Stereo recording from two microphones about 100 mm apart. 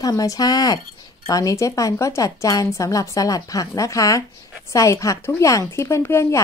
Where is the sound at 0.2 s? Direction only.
40° left (ahead or behind).